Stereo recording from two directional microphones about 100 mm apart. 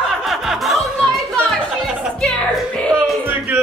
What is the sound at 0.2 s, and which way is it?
Music, centre (ahead or behind).